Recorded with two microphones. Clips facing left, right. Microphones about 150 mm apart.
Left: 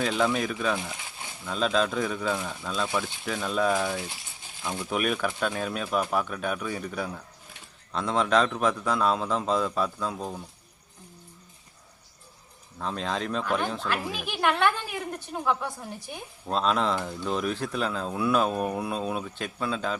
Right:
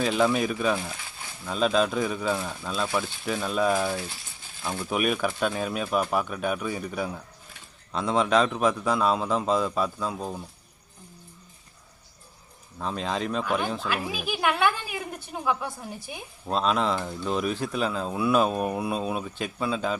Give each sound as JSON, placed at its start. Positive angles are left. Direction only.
{"t": 0.0, "sound": "speech", "side_deg": -10}
{"t": 3.9, "sound": "speech", "side_deg": 20}
{"t": 4.9, "sound": "speech", "side_deg": -10}
{"t": 12.8, "sound": "speech", "side_deg": -5}